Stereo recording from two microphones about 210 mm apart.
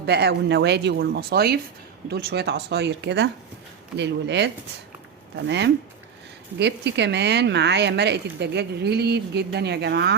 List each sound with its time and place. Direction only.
0.0 s a woman's voice: 50° right (ahead or behind)